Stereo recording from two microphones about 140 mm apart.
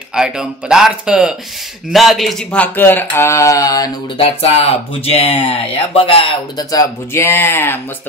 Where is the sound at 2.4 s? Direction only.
10° left (ahead or behind).